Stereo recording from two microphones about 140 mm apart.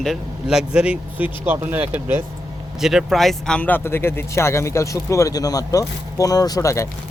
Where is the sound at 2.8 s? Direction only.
Centre (ahead or behind); by 6.8 s 20° left (ahead or behind).